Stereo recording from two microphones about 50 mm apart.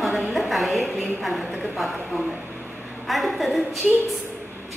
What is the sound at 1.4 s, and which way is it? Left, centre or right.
Speech, centre.